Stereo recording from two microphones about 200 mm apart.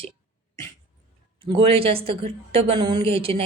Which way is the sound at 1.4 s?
25° right (ahead or behind).